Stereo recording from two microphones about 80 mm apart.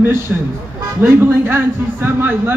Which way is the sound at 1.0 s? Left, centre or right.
Right.